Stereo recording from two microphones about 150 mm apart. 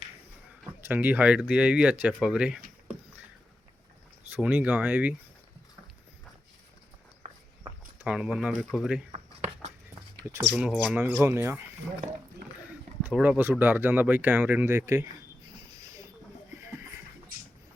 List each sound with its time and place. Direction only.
0.8 s speech: 10° right (ahead or behind)
4.3 s speech: 10° right (ahead or behind)
8.0 s speech: 5° right (ahead or behind)
9.1 s a sound: 45° right (ahead or behind)
10.5 s speech: 5° right (ahead or behind)
13.1 s speech: 10° right (ahead or behind)